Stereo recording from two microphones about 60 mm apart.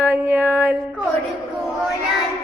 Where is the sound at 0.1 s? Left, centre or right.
Right.